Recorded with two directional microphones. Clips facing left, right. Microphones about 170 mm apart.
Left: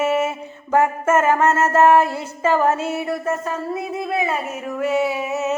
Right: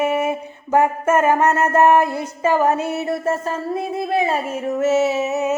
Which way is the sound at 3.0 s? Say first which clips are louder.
Right 2 dB; 25° right (ahead or behind).